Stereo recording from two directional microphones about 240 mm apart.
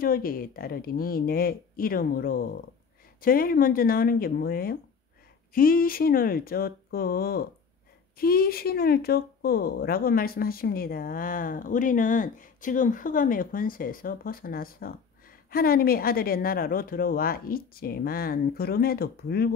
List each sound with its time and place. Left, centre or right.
0.0 s speech: left